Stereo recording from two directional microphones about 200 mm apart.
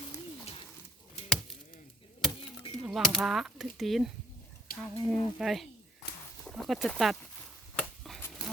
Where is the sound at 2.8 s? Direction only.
Centre (ahead or behind).